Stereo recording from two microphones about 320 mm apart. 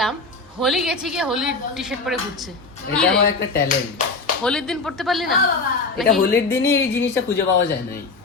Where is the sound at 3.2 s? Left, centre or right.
Left.